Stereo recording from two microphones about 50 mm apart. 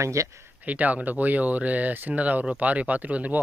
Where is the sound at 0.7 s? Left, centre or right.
Right.